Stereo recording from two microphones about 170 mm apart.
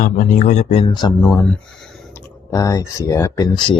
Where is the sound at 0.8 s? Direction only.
25° left (ahead or behind).